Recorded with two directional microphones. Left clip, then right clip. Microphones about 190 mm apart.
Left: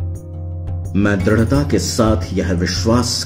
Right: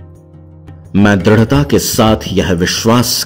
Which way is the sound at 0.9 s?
40° right (ahead or behind).